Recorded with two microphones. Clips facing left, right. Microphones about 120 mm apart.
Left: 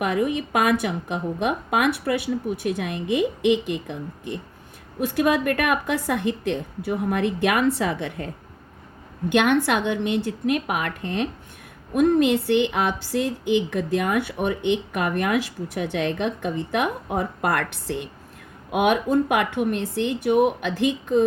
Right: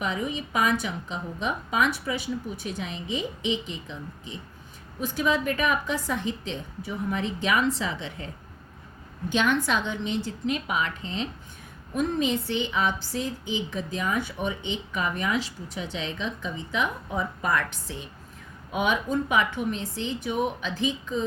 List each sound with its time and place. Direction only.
0.0 s speech: 60° left (ahead or behind)
9.3 s speech: 60° left (ahead or behind)